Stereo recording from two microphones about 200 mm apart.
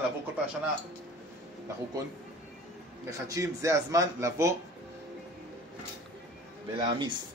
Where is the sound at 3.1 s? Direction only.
15° right (ahead or behind).